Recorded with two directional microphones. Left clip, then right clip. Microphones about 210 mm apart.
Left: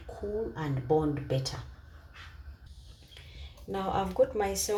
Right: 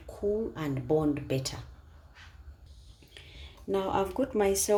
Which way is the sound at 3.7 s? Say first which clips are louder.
Right 2 dB; 55° right (ahead or behind).